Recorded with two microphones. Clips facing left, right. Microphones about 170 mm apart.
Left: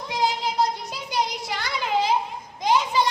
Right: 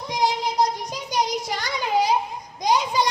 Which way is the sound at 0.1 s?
15° right (ahead or behind).